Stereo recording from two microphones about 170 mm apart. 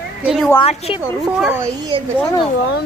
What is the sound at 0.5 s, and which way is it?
Speech, 35° left (ahead or behind).